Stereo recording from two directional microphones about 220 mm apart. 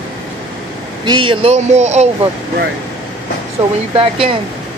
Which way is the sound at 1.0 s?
20° right (ahead or behind).